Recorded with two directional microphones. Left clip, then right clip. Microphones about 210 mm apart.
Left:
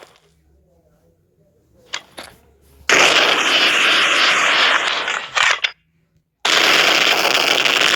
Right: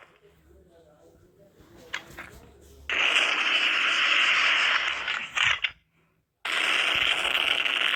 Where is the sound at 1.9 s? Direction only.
55° left (ahead or behind).